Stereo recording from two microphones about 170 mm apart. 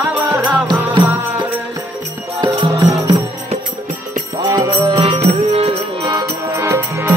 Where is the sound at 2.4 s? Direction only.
25° right (ahead or behind).